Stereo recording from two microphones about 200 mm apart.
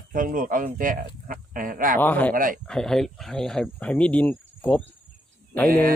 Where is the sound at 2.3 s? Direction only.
45° right (ahead or behind).